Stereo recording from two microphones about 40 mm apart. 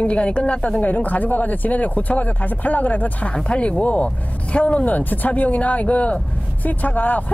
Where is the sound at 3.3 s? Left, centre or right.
Left.